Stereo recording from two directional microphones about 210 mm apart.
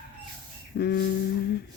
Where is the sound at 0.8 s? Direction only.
50° left (ahead or behind).